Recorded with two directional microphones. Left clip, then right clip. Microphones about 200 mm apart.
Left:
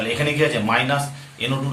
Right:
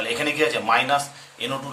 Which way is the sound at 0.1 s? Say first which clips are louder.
Left 2 dB; 30° right (ahead or behind).